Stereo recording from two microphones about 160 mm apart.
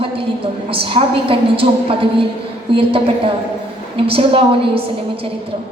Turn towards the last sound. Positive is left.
turn(degrees=-35)  # may be behind; listen again after turning